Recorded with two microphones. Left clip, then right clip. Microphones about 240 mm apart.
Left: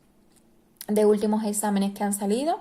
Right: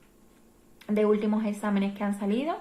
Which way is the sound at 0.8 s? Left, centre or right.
Left.